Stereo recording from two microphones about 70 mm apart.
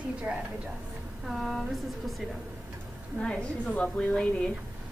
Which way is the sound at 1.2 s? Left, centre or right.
Centre.